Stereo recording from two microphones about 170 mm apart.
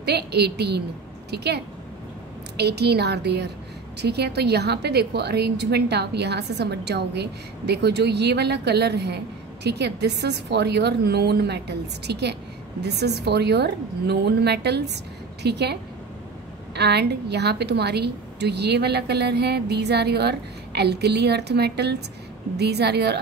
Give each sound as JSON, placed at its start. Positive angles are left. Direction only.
{"t": 0.0, "sound": "a woman's voice", "side_deg": -75}